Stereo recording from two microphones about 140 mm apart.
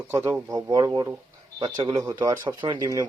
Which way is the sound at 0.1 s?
15° right (ahead or behind).